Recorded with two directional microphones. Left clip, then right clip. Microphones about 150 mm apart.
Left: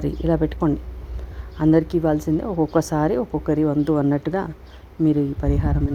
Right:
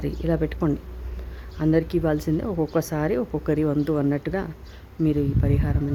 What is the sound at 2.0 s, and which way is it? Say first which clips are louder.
Speech: left 3 dB; centre (ahead or behind).